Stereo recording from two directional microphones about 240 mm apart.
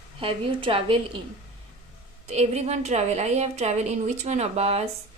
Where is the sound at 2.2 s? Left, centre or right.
Right.